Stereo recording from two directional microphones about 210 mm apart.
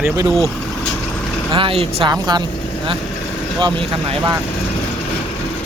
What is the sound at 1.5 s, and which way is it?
Speech, 25° right (ahead or behind).